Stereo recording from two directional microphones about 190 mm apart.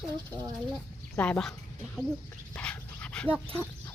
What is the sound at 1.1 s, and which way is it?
Speech, 5° left (ahead or behind).